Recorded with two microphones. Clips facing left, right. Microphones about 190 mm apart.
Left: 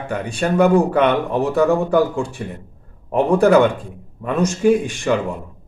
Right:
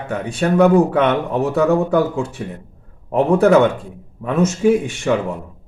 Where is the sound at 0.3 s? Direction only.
Centre (ahead or behind).